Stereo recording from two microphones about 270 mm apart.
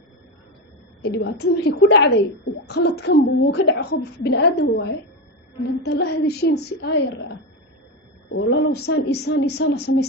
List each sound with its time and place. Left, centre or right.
1.0 s a woman's voice: left
8.3 s a woman's voice: left